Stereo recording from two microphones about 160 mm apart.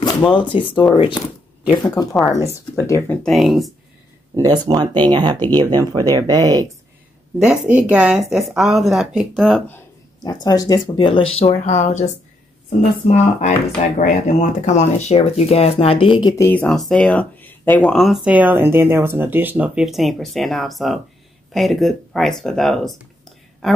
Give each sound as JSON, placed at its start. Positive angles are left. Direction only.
{"t": 0.3, "sound": "speech", "side_deg": 30}
{"t": 2.9, "sound": "speech", "side_deg": 15}
{"t": 3.3, "sound": "speech", "side_deg": 0}
{"t": 4.4, "sound": "speech", "side_deg": -25}
{"t": 7.3, "sound": "speech", "side_deg": -5}
{"t": 10.2, "sound": "speech", "side_deg": 25}
{"t": 13.9, "sound": "speech", "side_deg": 50}
{"t": 16.3, "sound": "speech", "side_deg": 10}